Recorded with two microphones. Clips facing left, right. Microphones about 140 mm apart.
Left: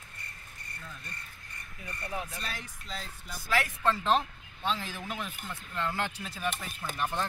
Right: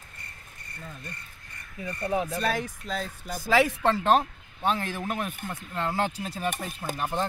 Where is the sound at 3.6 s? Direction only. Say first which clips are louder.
Right 6 dB; 75° right (ahead or behind).